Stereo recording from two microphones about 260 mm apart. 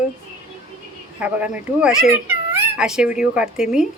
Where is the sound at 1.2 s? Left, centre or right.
Centre.